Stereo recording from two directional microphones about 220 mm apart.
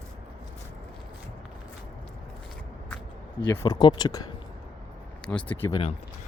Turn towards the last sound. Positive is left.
turn(degrees=5)  # may be behind; listen again after turning